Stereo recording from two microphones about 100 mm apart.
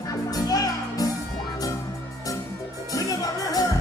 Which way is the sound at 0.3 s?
40° left (ahead or behind).